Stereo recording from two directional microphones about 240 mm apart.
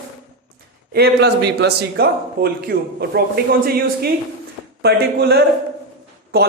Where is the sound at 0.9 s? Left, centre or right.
Right.